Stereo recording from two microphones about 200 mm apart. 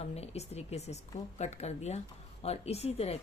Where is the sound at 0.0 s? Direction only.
30° left (ahead or behind).